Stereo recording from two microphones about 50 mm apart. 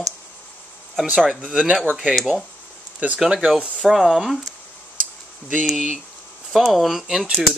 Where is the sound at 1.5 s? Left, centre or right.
Centre.